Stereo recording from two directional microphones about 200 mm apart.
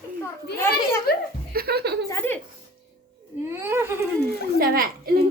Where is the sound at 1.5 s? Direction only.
50° right (ahead or behind).